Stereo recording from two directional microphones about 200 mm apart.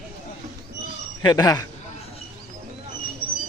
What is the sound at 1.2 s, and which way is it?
Speech, 20° left (ahead or behind).